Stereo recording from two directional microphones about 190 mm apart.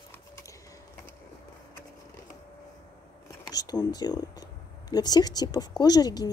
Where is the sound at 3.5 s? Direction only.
20° left (ahead or behind).